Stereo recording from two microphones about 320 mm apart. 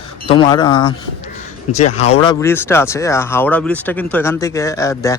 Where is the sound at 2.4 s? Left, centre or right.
Centre.